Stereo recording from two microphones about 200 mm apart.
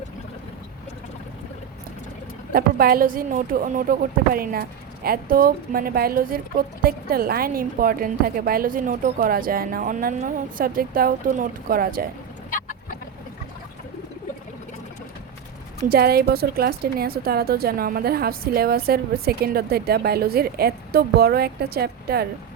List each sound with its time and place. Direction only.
2.5 s a woman's voice: 50° right (ahead or behind)
5.0 s a woman's voice: 45° right (ahead or behind)
12.5 s a sound: 45° left (ahead or behind)
15.9 s a woman's voice: 50° right (ahead or behind)